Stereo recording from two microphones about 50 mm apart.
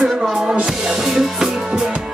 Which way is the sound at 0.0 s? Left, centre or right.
Centre.